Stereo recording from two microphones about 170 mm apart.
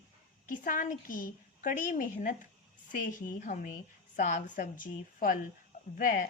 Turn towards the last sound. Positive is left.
turn(degrees=50)  # may be behind; listen again after turning